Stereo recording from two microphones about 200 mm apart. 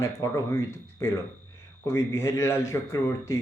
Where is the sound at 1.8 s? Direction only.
15° left (ahead or behind).